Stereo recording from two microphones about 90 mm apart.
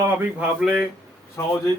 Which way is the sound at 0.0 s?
25° right (ahead or behind).